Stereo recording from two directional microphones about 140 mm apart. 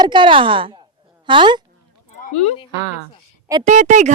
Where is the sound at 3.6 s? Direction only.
60° right (ahead or behind).